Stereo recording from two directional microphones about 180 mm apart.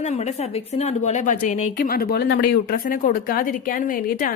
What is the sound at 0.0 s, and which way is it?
A woman's voice, 40° left (ahead or behind).